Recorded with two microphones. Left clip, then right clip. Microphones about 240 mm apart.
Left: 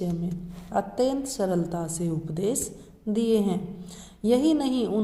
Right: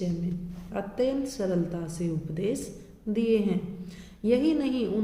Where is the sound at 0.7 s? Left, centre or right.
Left.